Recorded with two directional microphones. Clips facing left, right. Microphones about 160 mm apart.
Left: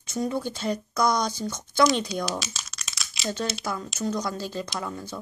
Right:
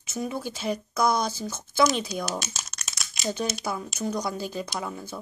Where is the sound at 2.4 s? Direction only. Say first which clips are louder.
Even; 50° right (ahead or behind).